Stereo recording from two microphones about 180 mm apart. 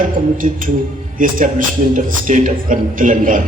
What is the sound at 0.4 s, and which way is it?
Speech, 45° right (ahead or behind).